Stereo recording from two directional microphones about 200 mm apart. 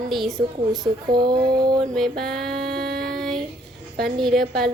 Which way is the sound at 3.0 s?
Centre (ahead or behind).